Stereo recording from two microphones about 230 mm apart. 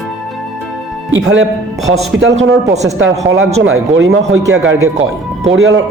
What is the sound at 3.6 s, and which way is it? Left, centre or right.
Speech, right.